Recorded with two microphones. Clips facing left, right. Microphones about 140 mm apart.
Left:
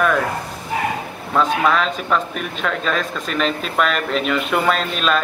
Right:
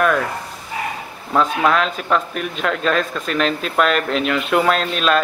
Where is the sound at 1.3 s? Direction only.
5° right (ahead or behind).